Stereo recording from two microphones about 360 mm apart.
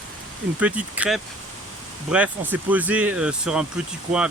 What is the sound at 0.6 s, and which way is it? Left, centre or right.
Speech, centre.